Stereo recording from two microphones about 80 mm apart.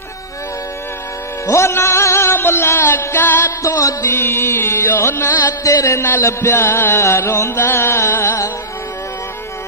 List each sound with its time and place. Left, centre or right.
1.4 s music: left